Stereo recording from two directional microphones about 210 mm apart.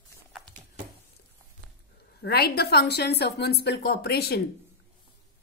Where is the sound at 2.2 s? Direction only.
50° left (ahead or behind).